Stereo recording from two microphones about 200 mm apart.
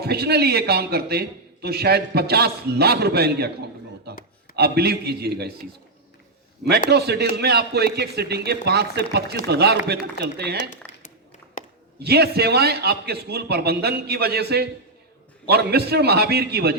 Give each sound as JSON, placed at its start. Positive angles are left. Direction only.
{"t": 0.0, "sound": "a man's voice", "side_deg": -55}
{"t": 4.5, "sound": "a man's voice", "side_deg": -55}
{"t": 6.9, "sound": "a man's voice", "side_deg": -55}
{"t": 10.8, "sound": "a sound", "side_deg": 5}
{"t": 11.6, "sound": "a sound", "side_deg": 40}
{"t": 11.9, "sound": "a man's voice", "side_deg": -55}